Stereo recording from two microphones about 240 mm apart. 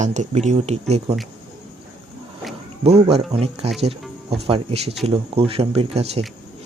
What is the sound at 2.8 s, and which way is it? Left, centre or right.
Speech, right.